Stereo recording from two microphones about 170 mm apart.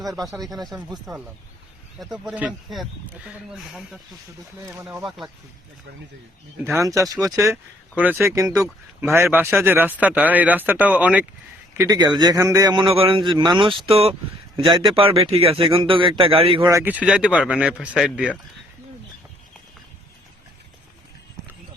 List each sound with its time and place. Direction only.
0.0 s speech: centre (ahead or behind)
2.0 s speech: centre (ahead or behind)
4.6 s speech: 15° right (ahead or behind)
5.0 s speech: centre (ahead or behind)
6.7 s speech: 15° right (ahead or behind)
11.8 s a man's voice: 20° right (ahead or behind)
16.6 s speech: 15° right (ahead or behind)